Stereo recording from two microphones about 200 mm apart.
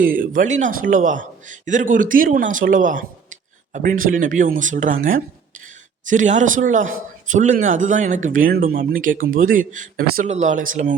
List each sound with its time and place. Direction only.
0.0 s speech: 45° right (ahead or behind)